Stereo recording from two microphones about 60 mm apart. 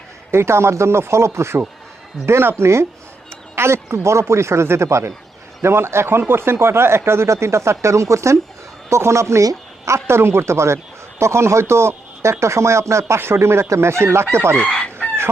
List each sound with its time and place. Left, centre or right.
0.3 s speech: right
13.1 s speech: right
14.5 s chicken: centre